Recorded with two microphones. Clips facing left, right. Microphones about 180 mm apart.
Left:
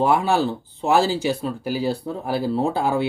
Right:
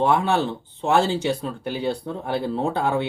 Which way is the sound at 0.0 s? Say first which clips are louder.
Left 1 dB; 5° left (ahead or behind).